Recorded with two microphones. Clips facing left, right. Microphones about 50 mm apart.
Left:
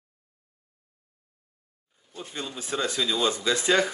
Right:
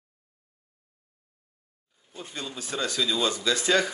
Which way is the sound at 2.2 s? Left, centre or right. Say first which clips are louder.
Left 1 dB; left.